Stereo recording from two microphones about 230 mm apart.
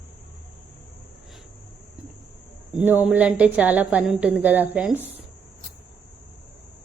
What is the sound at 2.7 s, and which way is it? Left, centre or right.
A woman's voice, centre.